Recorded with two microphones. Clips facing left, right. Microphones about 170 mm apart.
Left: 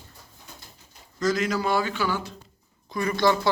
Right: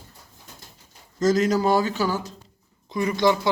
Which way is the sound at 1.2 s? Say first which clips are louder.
Right 5 dB; 40° right (ahead or behind).